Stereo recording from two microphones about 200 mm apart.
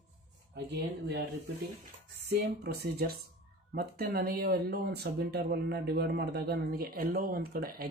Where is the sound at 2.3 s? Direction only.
55° right (ahead or behind).